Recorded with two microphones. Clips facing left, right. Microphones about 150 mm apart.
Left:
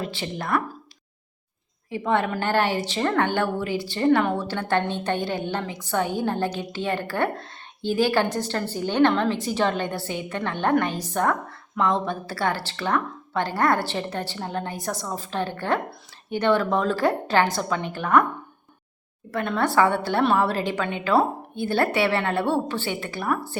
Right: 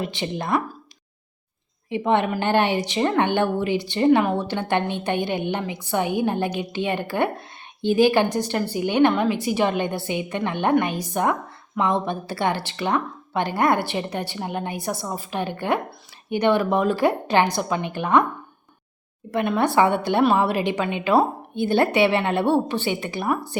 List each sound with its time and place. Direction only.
0.0 s a woman's voice: 20° right (ahead or behind)
1.9 s a woman's voice: 20° right (ahead or behind)
19.3 s a woman's voice: 15° right (ahead or behind)